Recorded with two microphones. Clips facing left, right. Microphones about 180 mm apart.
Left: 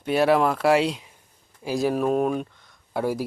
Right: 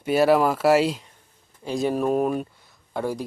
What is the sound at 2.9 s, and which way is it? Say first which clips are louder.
Speech: left 2 dB; 10° left (ahead or behind).